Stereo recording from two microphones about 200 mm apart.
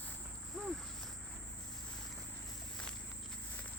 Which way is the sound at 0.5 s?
Centre (ahead or behind).